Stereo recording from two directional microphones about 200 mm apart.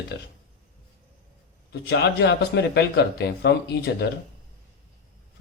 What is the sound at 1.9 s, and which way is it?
Speech, 55° left (ahead or behind).